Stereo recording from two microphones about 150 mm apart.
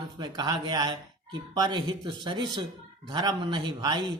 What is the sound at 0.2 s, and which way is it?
Speech, 30° right (ahead or behind).